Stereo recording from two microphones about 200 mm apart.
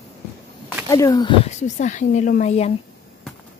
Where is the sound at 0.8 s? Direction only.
15° left (ahead or behind); by 2.7 s 35° left (ahead or behind).